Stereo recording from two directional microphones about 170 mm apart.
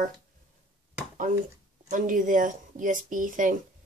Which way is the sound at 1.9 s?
50° right (ahead or behind).